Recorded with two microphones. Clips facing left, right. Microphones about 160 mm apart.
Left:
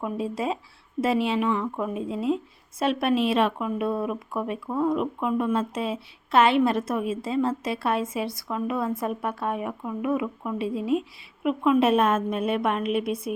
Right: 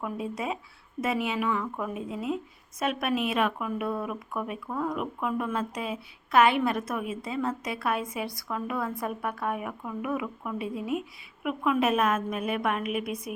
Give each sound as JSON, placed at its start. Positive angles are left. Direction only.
{"t": 0.0, "sound": "speech", "side_deg": 30}